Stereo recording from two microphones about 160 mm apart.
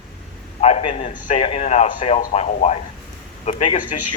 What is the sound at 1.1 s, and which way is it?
Speech, 55° left (ahead or behind).